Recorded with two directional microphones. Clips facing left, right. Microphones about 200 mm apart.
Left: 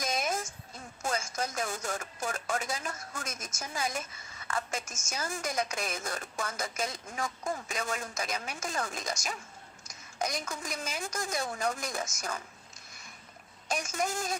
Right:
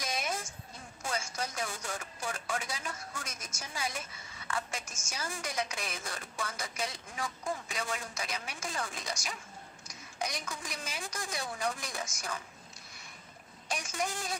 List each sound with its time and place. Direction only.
0.0 s a sound: 45° left (ahead or behind)
1.0 s a woman's voice: 45° left (ahead or behind)
13.7 s a woman's voice: 45° left (ahead or behind)